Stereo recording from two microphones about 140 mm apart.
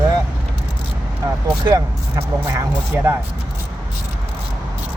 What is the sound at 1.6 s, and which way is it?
Speech, 25° right (ahead or behind).